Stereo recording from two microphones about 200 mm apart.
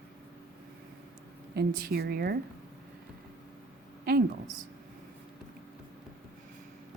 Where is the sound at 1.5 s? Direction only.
50° right (ahead or behind).